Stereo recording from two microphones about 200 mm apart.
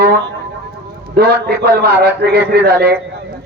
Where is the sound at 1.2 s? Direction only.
50° right (ahead or behind).